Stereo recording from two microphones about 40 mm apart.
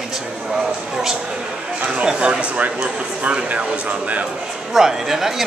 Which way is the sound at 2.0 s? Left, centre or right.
Right.